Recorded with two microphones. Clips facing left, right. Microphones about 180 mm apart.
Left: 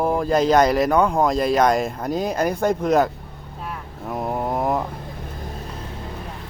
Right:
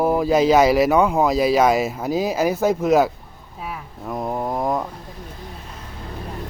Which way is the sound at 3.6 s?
Centre (ahead or behind).